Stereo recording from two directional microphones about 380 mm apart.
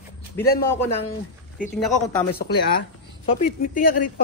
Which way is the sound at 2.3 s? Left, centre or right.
Left.